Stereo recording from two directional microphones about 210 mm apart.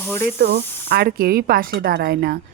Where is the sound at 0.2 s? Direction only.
50° right (ahead or behind).